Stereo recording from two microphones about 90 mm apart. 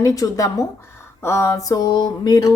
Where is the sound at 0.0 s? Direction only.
40° left (ahead or behind).